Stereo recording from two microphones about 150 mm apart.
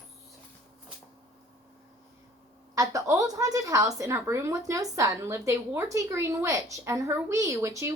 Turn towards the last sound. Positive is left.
turn(degrees=-20)  # may be behind; listen again after turning